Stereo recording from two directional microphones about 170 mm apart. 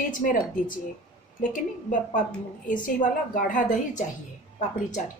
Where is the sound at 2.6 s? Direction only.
50° left (ahead or behind).